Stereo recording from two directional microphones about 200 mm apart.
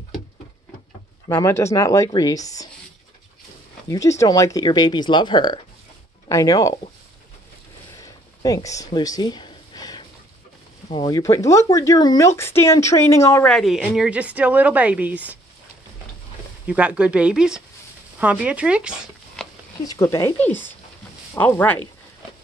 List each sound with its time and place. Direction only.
1.3 s speech: 15° left (ahead or behind)
3.9 s speech: 15° left (ahead or behind)
8.0 s a sound: 20° left (ahead or behind)
10.9 s speech: 20° left (ahead or behind); by 15.3 s 5° right (ahead or behind)
16.6 s speech: 5° right (ahead or behind)
19.8 s speech: 15° left (ahead or behind)